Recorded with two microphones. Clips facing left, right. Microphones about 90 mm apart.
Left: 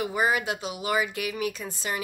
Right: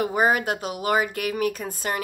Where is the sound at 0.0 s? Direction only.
45° right (ahead or behind).